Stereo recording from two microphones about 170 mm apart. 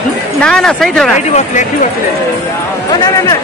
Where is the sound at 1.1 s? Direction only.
45° left (ahead or behind).